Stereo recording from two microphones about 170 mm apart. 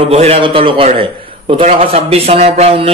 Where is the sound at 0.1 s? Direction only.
35° right (ahead or behind).